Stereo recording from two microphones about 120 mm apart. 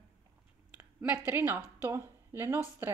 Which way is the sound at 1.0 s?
15° right (ahead or behind).